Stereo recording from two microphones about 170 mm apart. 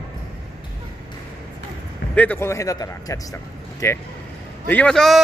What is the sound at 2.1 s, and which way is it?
A man's voice, 10° left (ahead or behind).